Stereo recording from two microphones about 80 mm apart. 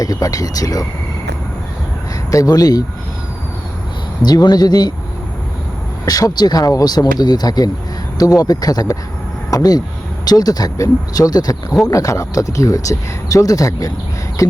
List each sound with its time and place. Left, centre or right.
0.0 s speech: left
2.3 s speech: left
4.2 s speech: left
6.1 s speech: left